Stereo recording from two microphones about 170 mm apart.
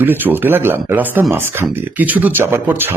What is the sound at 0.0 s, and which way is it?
Speech, 10° right (ahead or behind).